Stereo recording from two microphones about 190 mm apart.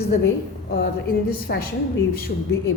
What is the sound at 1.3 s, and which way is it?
A woman's voice, 50° left (ahead or behind).